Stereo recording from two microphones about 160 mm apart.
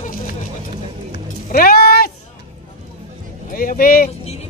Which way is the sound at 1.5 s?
70° left (ahead or behind).